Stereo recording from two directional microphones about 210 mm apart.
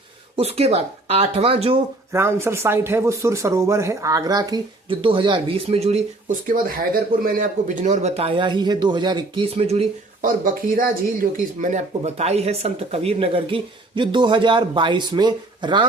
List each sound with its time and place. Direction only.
0.3 s speech: 30° right (ahead or behind)
2.1 s speech: 10° right (ahead or behind)